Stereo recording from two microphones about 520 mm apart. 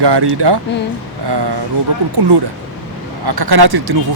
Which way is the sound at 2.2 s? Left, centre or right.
Right.